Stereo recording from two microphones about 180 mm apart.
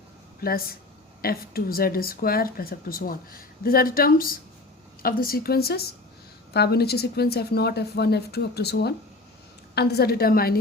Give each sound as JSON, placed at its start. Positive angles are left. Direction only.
{"t": 0.4, "sound": "speech", "side_deg": 55}